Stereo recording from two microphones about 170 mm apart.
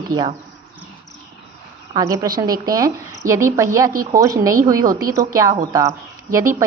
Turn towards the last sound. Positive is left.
turn(degrees=-15)  # may be behind; listen again after turning